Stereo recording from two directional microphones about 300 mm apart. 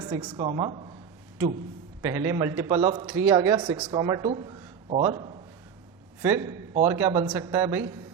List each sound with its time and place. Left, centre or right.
0.0 s a man's voice: centre
2.0 s a man's voice: centre